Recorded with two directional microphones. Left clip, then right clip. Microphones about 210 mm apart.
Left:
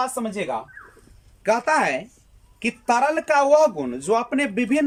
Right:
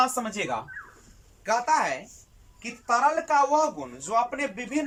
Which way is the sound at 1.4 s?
45° left (ahead or behind).